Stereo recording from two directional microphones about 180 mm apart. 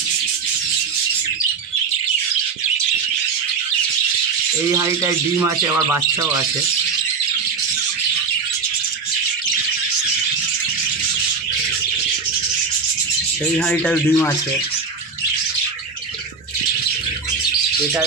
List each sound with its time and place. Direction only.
4.6 s speech: 15° right (ahead or behind)
13.6 s speech: 10° left (ahead or behind)